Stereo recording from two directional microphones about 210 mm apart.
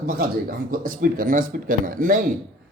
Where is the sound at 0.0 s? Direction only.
45° right (ahead or behind).